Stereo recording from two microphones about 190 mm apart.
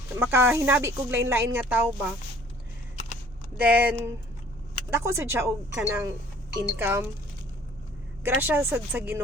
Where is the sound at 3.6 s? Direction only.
10° right (ahead or behind).